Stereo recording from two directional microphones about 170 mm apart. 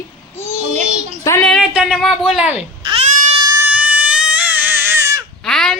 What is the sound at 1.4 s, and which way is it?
Speech, centre (ahead or behind).